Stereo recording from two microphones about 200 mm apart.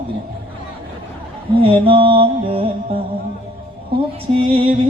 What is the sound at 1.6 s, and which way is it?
Mantra, 25° right (ahead or behind).